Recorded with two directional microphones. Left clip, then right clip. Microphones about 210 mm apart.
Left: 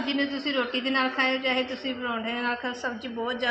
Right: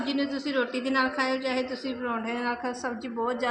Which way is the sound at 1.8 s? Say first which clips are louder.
Left 1 dB; 10° left (ahead or behind).